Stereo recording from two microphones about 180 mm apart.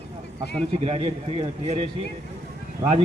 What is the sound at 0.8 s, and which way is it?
A man's voice, 35° right (ahead or behind).